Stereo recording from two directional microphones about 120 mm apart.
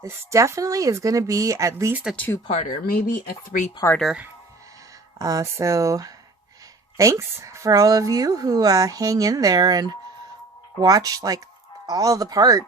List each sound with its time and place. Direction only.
0.0 s speech: 25° right (ahead or behind)
2.1 s speech: 15° left (ahead or behind)
2.5 s speech: 80° left
3.8 s speech: 25° left (ahead or behind)
5.2 s speech: 25° right (ahead or behind)